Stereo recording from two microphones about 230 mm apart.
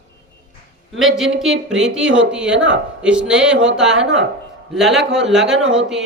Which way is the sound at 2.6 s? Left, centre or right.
Right.